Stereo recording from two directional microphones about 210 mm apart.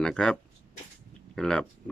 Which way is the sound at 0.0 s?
5° left (ahead or behind).